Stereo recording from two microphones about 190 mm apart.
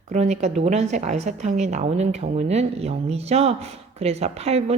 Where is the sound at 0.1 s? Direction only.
35° right (ahead or behind).